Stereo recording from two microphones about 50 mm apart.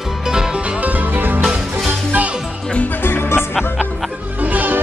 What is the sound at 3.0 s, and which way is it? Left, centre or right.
Music, left.